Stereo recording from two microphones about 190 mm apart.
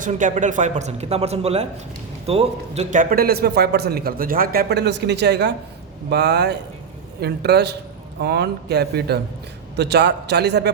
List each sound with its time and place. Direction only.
0.0 s a man's voice: 40° right (ahead or behind); by 10.7 s 60° right (ahead or behind)